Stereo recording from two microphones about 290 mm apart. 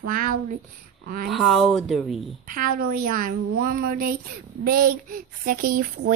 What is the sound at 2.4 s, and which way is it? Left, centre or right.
A woman's voice, right.